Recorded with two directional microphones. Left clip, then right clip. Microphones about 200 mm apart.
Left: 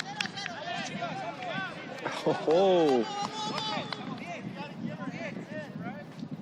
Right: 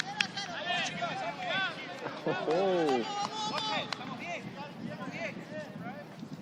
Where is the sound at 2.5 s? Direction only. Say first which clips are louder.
Left 6 dB; 25° left (ahead or behind).